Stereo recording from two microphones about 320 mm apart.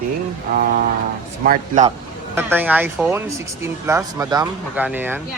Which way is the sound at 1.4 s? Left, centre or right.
Right.